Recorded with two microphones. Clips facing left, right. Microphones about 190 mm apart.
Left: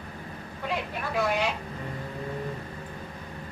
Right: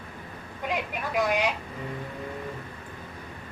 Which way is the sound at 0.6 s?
15° right (ahead or behind).